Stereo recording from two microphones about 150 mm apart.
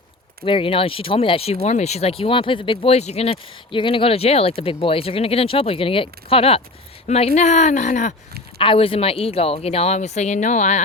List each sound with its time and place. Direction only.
0.4 s speech: 35° left (ahead or behind); by 8.1 s 55° left (ahead or behind)
8.5 s speech: 35° left (ahead or behind); by 10.8 s 55° left (ahead or behind)